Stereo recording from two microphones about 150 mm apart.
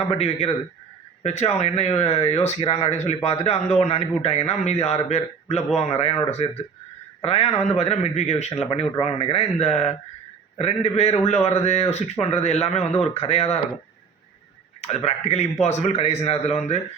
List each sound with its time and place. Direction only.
0.1 s a man's voice: 45° left (ahead or behind)
14.8 s a man's voice: 45° left (ahead or behind)